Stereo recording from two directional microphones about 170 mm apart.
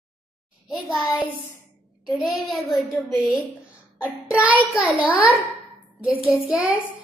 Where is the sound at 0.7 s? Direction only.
Centre (ahead or behind).